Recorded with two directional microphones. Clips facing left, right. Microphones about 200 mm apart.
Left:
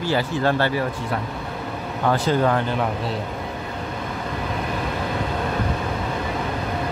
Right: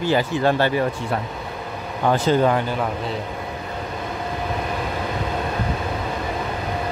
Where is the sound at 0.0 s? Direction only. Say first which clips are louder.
Right 2 dB; 15° right (ahead or behind).